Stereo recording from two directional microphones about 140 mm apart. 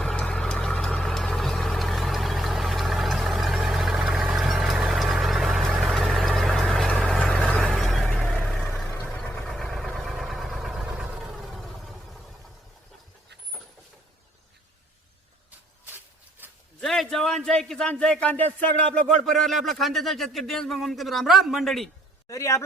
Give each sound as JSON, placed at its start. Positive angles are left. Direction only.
{"t": 0.0, "sound": "vehicle", "side_deg": 5}
{"t": 16.4, "sound": "a sound", "side_deg": -15}
{"t": 16.8, "sound": "speech", "side_deg": 0}
{"t": 19.5, "sound": "a man's voice", "side_deg": 0}
{"t": 22.3, "sound": "speech", "side_deg": 20}